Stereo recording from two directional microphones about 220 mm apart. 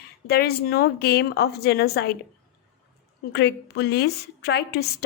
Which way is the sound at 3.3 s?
50° left (ahead or behind).